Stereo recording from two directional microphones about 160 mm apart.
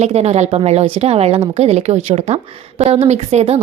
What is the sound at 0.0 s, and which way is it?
Speech, 40° right (ahead or behind).